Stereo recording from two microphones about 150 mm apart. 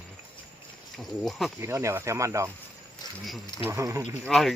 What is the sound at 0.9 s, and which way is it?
Speech, centre (ahead or behind).